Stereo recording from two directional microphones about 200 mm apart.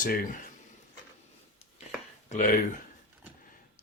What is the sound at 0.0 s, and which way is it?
Speech, 45° left (ahead or behind).